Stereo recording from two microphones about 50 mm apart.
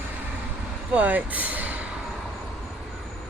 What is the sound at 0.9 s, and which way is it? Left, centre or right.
Speech, right.